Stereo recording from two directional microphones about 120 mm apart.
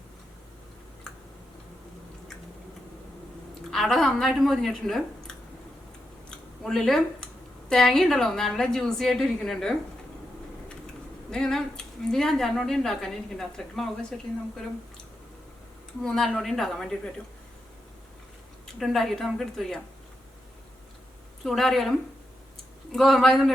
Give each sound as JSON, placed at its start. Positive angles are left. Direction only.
{"t": 1.1, "sound": "tick-tock", "side_deg": 5}
{"t": 3.7, "sound": "a woman's voice", "side_deg": 0}
{"t": 6.6, "sound": "a woman's voice", "side_deg": 5}
{"t": 11.3, "sound": "a woman's voice", "side_deg": 5}
{"t": 16.0, "sound": "a woman's voice", "side_deg": 5}
{"t": 18.8, "sound": "a woman's voice", "side_deg": 0}
{"t": 21.4, "sound": "a woman's voice", "side_deg": 0}